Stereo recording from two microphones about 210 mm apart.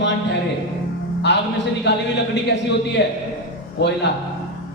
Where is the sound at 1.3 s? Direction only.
55° left (ahead or behind).